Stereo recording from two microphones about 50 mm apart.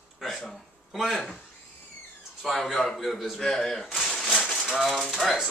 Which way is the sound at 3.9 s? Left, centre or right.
Centre.